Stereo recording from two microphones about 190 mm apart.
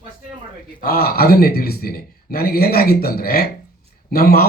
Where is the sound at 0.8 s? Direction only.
55° left (ahead or behind).